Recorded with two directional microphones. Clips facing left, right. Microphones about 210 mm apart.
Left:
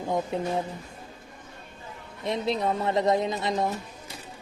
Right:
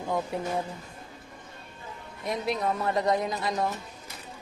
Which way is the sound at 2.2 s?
25° left (ahead or behind).